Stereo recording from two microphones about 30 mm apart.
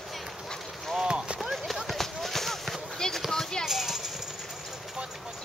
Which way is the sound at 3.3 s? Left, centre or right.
Left.